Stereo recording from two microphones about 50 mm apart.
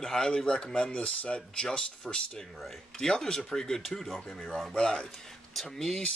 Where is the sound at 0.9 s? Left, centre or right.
Left.